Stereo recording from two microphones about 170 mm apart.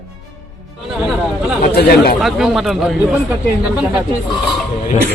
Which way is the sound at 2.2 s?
Centre (ahead or behind).